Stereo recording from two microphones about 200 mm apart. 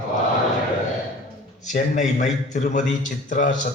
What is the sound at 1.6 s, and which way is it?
Speech, 40° left (ahead or behind).